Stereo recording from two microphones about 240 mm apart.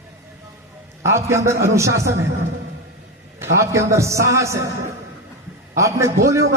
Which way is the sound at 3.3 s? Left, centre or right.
Centre.